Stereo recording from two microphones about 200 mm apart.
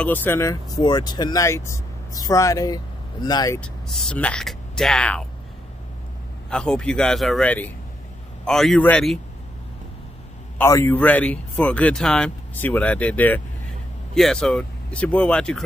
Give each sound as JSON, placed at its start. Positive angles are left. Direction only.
{"t": 0.0, "sound": "speech", "side_deg": 10}
{"t": 3.6, "sound": "speech", "side_deg": 0}
{"t": 6.5, "sound": "speech", "side_deg": 5}
{"t": 10.6, "sound": "speech", "side_deg": 15}